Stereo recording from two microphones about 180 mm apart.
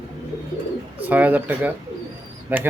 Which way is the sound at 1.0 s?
10° right (ahead or behind).